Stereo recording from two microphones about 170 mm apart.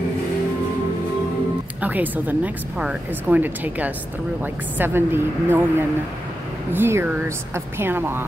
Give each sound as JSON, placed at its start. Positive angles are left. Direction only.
{"t": 1.8, "sound": "speech", "side_deg": -10}